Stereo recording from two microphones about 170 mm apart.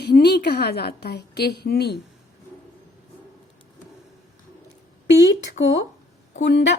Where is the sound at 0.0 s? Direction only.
70° left (ahead or behind).